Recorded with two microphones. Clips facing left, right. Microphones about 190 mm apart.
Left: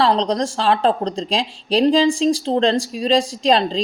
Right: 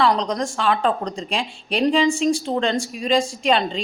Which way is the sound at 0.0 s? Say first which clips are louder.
Left 2 dB; 35° left (ahead or behind).